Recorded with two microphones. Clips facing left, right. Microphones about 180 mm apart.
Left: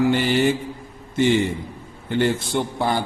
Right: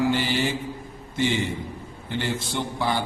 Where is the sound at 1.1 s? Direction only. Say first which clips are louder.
Left 6 dB; 50° left (ahead or behind).